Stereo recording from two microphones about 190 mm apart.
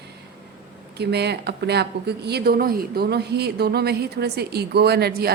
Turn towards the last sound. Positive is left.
turn(degrees=-55)  # may be behind; listen again after turning